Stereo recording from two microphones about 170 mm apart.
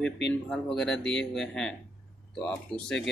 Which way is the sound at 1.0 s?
90° left.